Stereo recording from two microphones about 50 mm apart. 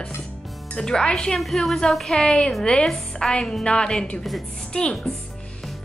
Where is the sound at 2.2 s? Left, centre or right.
Centre.